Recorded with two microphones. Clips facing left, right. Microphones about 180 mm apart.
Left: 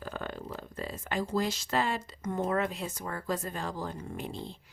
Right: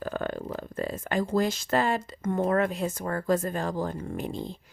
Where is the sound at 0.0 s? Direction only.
50° right (ahead or behind).